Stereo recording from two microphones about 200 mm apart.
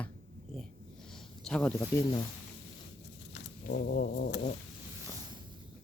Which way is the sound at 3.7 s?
45° left (ahead or behind).